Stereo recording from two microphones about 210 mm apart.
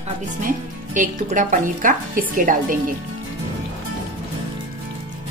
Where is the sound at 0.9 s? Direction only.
40° right (ahead or behind).